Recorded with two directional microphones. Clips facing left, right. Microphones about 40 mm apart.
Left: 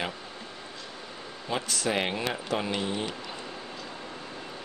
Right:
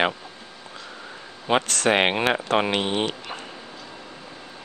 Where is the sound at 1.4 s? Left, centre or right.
Right.